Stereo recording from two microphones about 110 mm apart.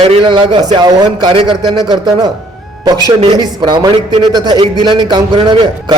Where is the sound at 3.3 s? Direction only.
40° right (ahead or behind).